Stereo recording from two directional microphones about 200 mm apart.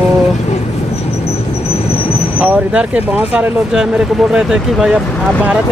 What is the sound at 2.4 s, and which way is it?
Speech, 5° right (ahead or behind).